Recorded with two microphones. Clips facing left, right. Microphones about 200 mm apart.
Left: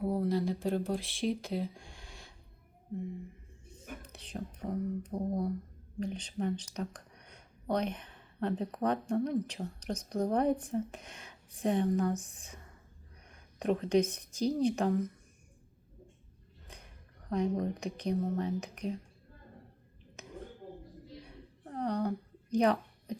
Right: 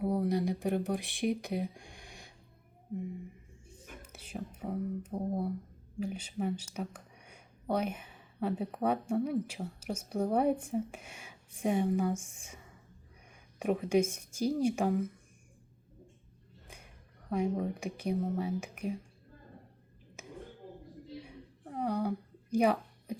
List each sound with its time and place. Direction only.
0.0 s speech: 15° right (ahead or behind)
4.0 s a woman's voice: 10° right (ahead or behind)
17.2 s speech: 10° right (ahead or behind)
21.7 s a sound: 10° right (ahead or behind)